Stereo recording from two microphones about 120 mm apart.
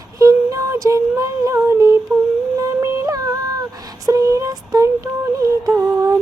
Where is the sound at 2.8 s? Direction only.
25° right (ahead or behind).